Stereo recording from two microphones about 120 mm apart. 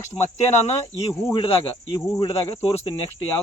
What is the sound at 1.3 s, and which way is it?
Speech, 45° left (ahead or behind).